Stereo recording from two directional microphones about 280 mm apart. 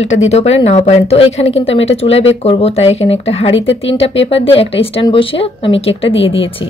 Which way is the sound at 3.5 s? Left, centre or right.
Left.